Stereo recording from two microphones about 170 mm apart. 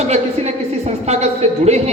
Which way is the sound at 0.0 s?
40° right (ahead or behind).